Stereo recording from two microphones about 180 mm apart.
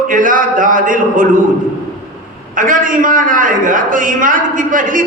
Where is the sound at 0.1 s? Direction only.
50° right (ahead or behind).